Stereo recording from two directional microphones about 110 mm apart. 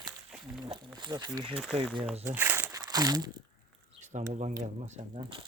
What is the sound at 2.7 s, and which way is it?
Crumpling, 35° right (ahead or behind).